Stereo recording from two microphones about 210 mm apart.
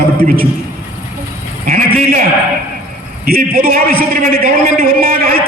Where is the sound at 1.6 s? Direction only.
40° right (ahead or behind).